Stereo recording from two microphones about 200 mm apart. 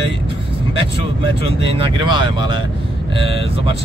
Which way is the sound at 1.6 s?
25° right (ahead or behind).